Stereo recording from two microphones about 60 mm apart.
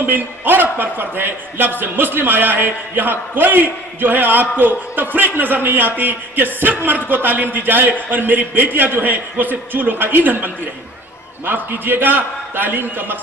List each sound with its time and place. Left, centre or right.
0.0 s a man's voice: right